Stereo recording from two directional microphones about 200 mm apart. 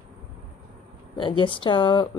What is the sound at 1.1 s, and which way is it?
Speech, 25° left (ahead or behind).